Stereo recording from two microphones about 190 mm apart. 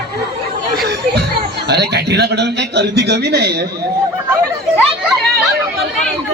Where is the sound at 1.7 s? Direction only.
60° right (ahead or behind).